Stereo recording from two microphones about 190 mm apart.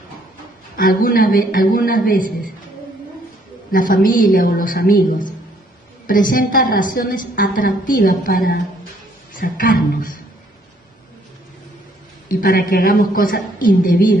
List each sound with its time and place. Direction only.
0.7 s a woman's voice: 50° left (ahead or behind)
3.7 s a woman's voice: 45° left (ahead or behind)
12.3 s a woman's voice: 50° left (ahead or behind)